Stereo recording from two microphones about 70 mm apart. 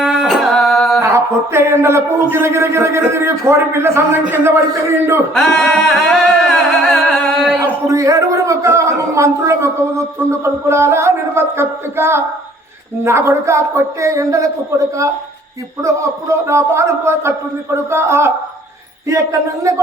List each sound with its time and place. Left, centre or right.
0.0 s singing: centre
0.6 s music: centre
1.0 s a man's voice: right
5.3 s music: centre
7.6 s a man's voice: right